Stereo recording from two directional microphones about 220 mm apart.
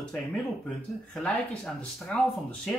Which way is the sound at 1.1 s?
5° left (ahead or behind).